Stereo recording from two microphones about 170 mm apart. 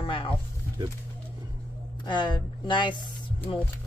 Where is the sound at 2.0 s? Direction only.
25° left (ahead or behind).